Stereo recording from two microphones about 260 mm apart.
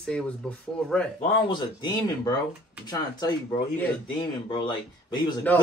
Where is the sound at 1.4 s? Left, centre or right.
Centre.